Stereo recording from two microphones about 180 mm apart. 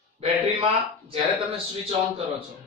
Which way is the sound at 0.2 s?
30° right (ahead or behind).